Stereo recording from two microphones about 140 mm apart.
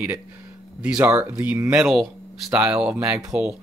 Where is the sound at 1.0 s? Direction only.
15° right (ahead or behind).